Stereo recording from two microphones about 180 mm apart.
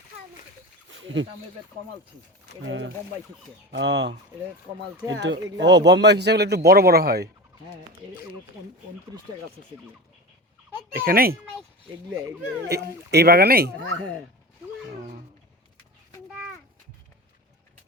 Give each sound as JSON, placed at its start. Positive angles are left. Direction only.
{"t": 0.9, "sound": "a sound", "side_deg": -90}
{"t": 2.6, "sound": "a man's voice", "side_deg": -90}
{"t": 5.2, "sound": "a man's voice", "side_deg": -80}
{"t": 10.9, "sound": "speech", "side_deg": -55}
{"t": 12.6, "sound": "speech", "side_deg": -65}
{"t": 14.8, "sound": "speech", "side_deg": -45}